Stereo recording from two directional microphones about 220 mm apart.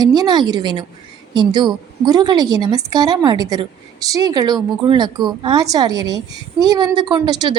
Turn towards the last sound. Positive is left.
turn(degrees=-20)  # may be behind; listen again after turning